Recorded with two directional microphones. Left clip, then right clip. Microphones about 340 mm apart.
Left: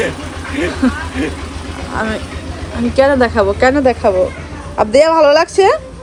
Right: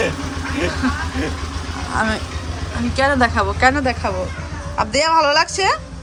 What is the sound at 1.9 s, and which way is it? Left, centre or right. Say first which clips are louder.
A woman's voice: left 1 dB; centre.